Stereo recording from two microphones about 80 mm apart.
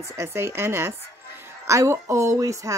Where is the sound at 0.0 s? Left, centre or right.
Right.